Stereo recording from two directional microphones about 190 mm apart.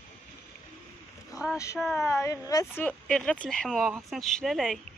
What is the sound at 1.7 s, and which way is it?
Speech, centre (ahead or behind).